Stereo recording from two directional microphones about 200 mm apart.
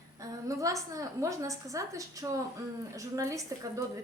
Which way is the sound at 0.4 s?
15° right (ahead or behind).